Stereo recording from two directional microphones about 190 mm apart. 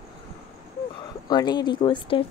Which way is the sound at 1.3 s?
20° left (ahead or behind).